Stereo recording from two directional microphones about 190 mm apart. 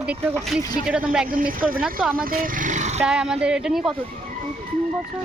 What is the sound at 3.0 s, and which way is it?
Speech, 5° right (ahead or behind).